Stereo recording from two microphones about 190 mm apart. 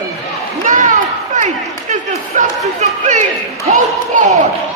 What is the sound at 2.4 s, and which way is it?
Speech, 40° right (ahead or behind).